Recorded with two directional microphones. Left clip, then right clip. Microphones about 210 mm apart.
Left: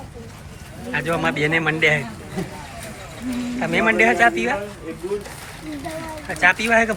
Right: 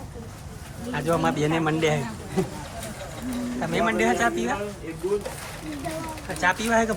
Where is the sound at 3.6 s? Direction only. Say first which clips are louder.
Left 7 dB; 5° right (ahead or behind).